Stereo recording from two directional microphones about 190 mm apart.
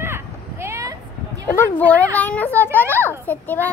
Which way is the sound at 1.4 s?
10° left (ahead or behind).